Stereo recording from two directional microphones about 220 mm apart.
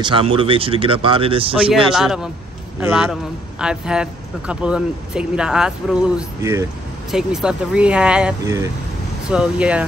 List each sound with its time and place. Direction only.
0.0 s speech: 25° right (ahead or behind)
1.5 s a man's voice: 5° right (ahead or behind)
7.1 s a man's voice: centre (ahead or behind)